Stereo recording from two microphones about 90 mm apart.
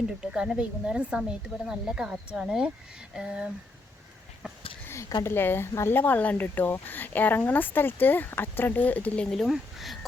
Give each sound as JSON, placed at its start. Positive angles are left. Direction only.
{"t": 0.2, "sound": "speech", "side_deg": -10}
{"t": 4.9, "sound": "speech", "side_deg": 35}
{"t": 9.2, "sound": "speech", "side_deg": 0}